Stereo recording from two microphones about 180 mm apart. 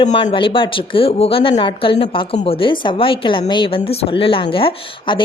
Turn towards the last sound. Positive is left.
turn(degrees=30)  # may be behind; listen again after turning